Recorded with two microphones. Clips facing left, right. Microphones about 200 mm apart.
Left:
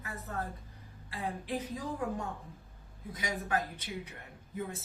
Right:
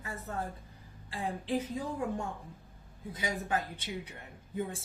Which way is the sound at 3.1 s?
30° right (ahead or behind).